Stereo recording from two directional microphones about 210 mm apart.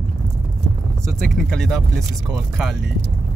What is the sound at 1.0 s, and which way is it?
Speech, centre (ahead or behind).